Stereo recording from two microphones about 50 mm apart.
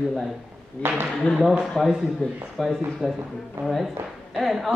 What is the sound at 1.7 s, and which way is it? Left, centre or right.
A man's voice, centre.